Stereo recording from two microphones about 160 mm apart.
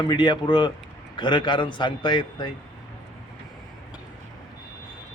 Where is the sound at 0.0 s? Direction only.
30° left (ahead or behind).